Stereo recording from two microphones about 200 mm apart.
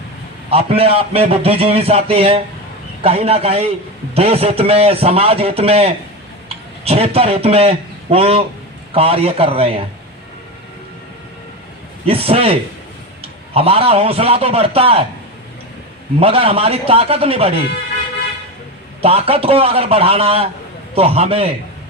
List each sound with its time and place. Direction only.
0.5 s a man's voice: 30° right (ahead or behind)
12.0 s a man's voice: 30° right (ahead or behind)
16.2 s a man's voice: 30° right (ahead or behind)
19.0 s a man's voice: 30° right (ahead or behind)